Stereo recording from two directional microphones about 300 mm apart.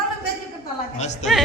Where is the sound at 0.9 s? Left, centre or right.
Left.